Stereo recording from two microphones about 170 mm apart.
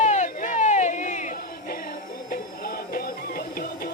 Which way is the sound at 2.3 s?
60° left (ahead or behind).